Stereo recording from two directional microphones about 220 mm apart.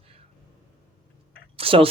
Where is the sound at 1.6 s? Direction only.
25° right (ahead or behind).